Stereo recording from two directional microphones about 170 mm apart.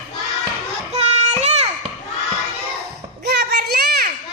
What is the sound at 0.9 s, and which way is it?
Child singing, 40° right (ahead or behind).